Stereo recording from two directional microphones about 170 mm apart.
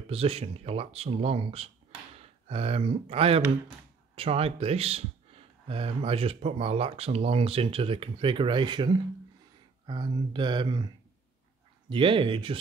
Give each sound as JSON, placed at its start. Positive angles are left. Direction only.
{"t": 0.1, "sound": "speech", "side_deg": -35}
{"t": 11.9, "sound": "speech", "side_deg": -30}